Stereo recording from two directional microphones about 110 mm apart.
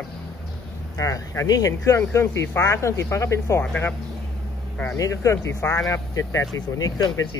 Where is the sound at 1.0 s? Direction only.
30° left (ahead or behind).